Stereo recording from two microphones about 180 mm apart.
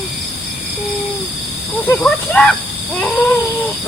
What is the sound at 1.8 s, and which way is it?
Wheeze, 5° left (ahead or behind).